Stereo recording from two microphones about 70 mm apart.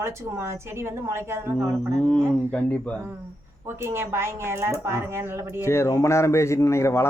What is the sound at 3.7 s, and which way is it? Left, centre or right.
A woman's voice, right.